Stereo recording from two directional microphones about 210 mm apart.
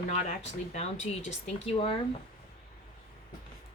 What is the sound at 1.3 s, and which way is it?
Speech, 25° left (ahead or behind).